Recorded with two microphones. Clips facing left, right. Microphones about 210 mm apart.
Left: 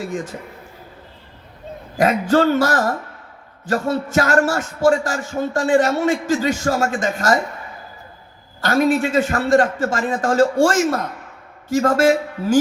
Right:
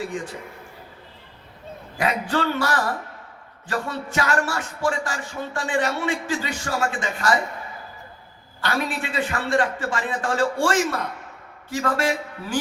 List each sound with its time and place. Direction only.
0.0 s speech: 40° left (ahead or behind)
2.0 s speech: 40° left (ahead or behind)
8.6 s a man's voice: 40° left (ahead or behind)